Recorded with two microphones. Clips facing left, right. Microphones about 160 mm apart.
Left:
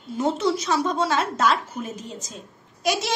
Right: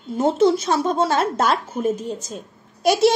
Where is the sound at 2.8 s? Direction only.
55° right (ahead or behind).